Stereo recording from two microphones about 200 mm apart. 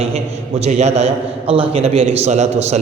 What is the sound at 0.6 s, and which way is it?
A man's voice, 35° right (ahead or behind).